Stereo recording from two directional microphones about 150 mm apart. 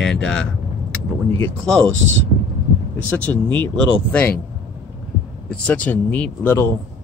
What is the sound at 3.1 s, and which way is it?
Speech, 10° left (ahead or behind).